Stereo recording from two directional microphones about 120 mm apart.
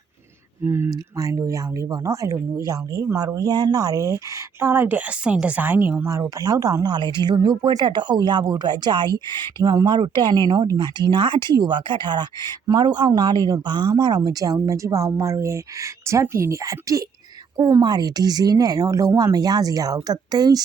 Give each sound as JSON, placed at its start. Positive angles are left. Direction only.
{"t": 0.6, "sound": "speech", "side_deg": -20}